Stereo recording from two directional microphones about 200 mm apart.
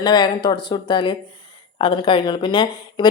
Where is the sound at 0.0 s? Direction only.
20° left (ahead or behind).